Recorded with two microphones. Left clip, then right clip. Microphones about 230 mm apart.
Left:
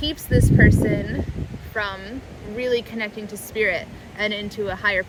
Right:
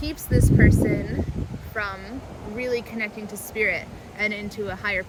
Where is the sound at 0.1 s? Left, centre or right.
Centre.